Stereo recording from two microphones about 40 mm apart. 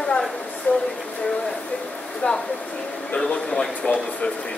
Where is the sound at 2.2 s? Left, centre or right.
Left.